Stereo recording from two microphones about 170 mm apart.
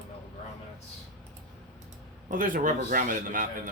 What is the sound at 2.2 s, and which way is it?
Speech, 50° right (ahead or behind).